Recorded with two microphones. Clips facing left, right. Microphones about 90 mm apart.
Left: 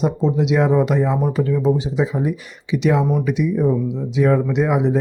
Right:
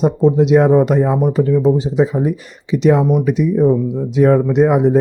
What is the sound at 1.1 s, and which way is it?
Speech, 15° right (ahead or behind).